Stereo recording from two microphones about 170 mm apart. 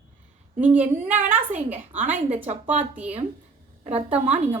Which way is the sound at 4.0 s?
35° right (ahead or behind).